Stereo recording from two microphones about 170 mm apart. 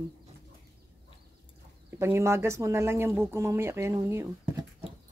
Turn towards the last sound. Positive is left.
turn(degrees=-15)  # may be behind; listen again after turning